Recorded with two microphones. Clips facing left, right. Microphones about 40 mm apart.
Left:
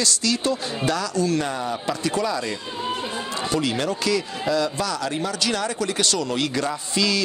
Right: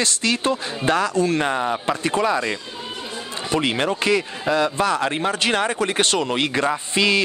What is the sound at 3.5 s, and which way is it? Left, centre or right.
Speech, right.